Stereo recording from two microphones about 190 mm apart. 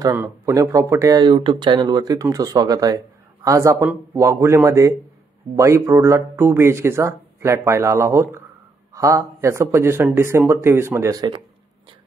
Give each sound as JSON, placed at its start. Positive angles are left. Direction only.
{"t": 0.0, "sound": "speech", "side_deg": -15}